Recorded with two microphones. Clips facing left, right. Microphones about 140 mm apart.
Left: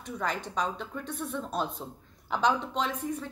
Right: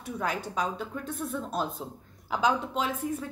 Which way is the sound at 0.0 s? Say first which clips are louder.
Right 1 dB; 5° right (ahead or behind).